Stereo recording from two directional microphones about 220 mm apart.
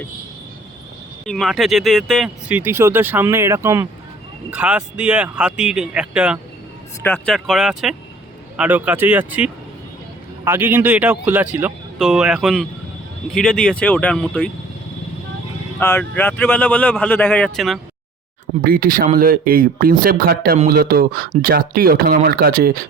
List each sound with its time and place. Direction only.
1.2 s speech: centre (ahead or behind)
7.0 s speech: 5° left (ahead or behind)
15.8 s speech: 10° left (ahead or behind)
18.6 s speech: 40° right (ahead or behind)